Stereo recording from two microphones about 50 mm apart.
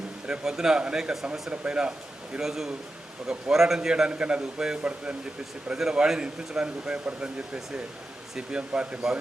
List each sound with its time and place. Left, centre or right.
0.3 s speech: centre
2.4 s a man's voice: centre